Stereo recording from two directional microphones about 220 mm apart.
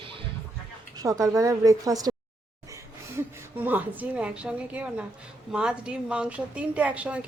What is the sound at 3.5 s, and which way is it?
A woman's voice, 10° right (ahead or behind).